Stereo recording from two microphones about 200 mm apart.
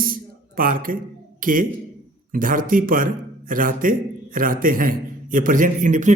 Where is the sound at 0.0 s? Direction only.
45° right (ahead or behind).